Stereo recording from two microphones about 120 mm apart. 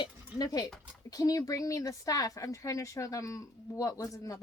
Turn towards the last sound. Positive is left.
turn(degrees=30)  # may be behind; listen again after turning